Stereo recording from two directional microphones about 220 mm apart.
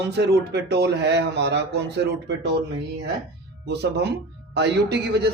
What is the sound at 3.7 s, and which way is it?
Speech, 50° right (ahead or behind).